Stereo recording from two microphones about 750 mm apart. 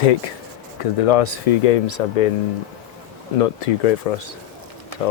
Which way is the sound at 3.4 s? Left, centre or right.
Left.